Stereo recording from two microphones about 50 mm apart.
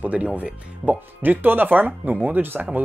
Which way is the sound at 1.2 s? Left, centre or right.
Right.